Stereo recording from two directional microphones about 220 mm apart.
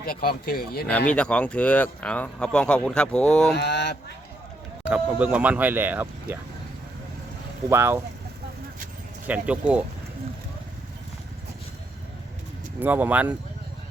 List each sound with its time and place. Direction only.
0.0 s speech: 45° left (ahead or behind)
1.1 s speech: 5° left (ahead or behind)
3.5 s speech: 50° left (ahead or behind)
4.9 s speech: 5° right (ahead or behind)
7.7 s speech: 10° right (ahead or behind)
9.2 s speech: 5° right (ahead or behind)
12.8 s speech: 10° right (ahead or behind)